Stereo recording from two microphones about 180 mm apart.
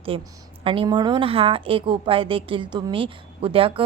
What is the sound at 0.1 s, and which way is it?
A woman's voice, 30° right (ahead or behind).